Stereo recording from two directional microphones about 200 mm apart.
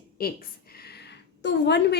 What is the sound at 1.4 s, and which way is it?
Speech, 60° left (ahead or behind).